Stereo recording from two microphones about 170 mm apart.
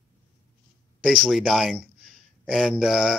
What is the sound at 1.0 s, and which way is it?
A man's voice, centre (ahead or behind).